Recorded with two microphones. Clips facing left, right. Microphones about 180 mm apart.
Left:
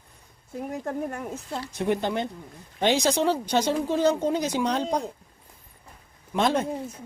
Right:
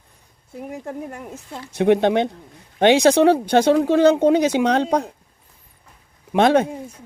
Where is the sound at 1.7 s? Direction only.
75° right (ahead or behind).